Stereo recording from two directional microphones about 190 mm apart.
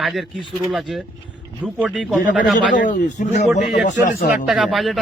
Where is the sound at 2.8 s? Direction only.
40° left (ahead or behind).